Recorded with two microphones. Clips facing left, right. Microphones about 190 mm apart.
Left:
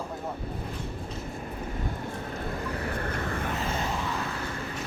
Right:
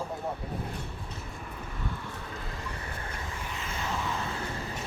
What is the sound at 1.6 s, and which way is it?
Vehicle, 45° left (ahead or behind).